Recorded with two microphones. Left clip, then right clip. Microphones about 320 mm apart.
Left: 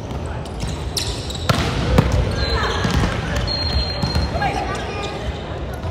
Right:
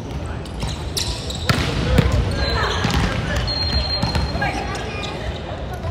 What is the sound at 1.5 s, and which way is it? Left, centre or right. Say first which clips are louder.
Trickle: left 1 dB; centre.